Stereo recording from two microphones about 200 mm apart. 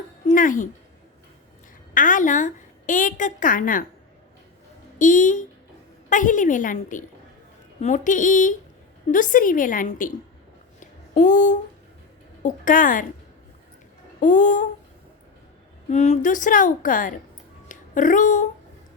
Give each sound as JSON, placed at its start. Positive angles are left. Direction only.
{"t": 0.3, "sound": "speech", "side_deg": 40}
{"t": 1.9, "sound": "a woman's voice", "side_deg": 40}
{"t": 4.9, "sound": "a woman's voice", "side_deg": 40}
{"t": 10.8, "sound": "a sound", "side_deg": 40}
{"t": 12.4, "sound": "a woman's voice", "side_deg": 40}
{"t": 14.2, "sound": "a woman's voice", "side_deg": 40}
{"t": 15.9, "sound": "a woman's voice", "side_deg": 35}